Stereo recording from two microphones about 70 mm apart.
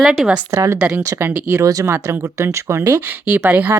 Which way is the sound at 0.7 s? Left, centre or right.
Centre.